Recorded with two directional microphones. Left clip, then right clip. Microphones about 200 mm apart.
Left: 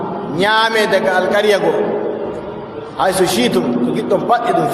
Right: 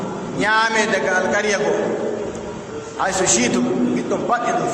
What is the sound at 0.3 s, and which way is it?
A man's voice, 45° left (ahead or behind).